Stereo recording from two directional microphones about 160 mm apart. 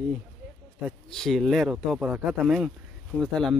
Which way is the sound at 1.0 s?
5° left (ahead or behind).